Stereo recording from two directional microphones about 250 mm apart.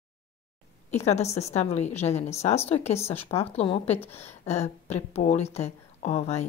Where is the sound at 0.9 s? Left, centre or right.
Left.